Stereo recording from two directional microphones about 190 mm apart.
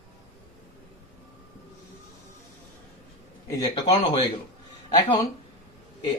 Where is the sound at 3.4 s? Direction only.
20° left (ahead or behind).